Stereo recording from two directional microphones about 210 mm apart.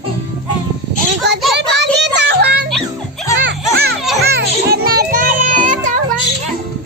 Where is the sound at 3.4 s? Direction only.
50° right (ahead or behind).